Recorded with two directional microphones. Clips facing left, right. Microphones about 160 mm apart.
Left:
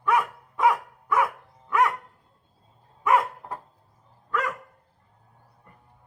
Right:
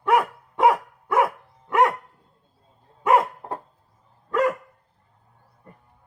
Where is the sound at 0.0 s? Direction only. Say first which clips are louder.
Right 4 dB; 30° right (ahead or behind).